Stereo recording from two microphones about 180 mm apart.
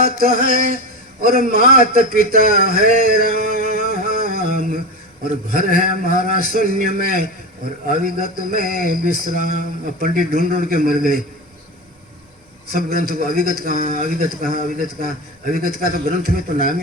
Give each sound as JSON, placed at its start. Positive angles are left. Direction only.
{"t": 0.0, "sound": "a man's voice", "side_deg": -55}
{"t": 1.2, "sound": "a sound", "side_deg": -55}
{"t": 5.2, "sound": "a man's voice", "side_deg": -50}
{"t": 12.7, "sound": "a man's voice", "side_deg": -55}